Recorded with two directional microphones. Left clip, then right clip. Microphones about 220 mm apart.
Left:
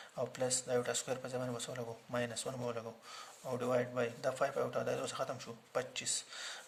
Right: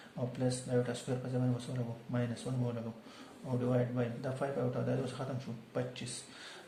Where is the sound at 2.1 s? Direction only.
45° left (ahead or behind).